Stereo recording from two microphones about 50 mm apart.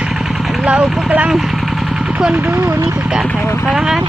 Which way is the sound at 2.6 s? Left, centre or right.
Right.